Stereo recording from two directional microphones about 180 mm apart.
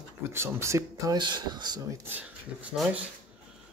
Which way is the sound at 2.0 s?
10° right (ahead or behind).